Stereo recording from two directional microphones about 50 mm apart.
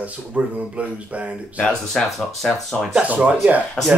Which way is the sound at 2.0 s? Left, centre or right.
Centre.